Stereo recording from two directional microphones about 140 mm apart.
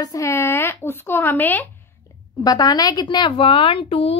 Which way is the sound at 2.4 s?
30° left (ahead or behind).